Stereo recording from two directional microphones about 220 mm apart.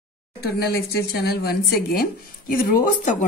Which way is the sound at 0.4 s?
45° left (ahead or behind).